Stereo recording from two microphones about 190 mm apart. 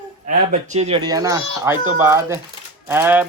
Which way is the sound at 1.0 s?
20° right (ahead or behind).